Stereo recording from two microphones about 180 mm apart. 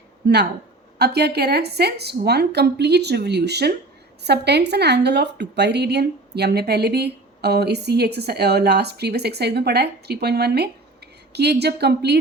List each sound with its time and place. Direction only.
0.9 s a woman's voice: 65° right (ahead or behind)